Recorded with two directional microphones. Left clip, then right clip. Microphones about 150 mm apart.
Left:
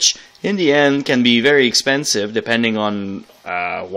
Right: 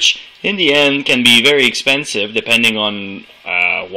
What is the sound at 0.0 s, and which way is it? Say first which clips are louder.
Speech: right 4 dB; 40° left (ahead or behind).